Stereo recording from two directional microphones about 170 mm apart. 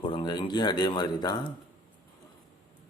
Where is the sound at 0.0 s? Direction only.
30° left (ahead or behind).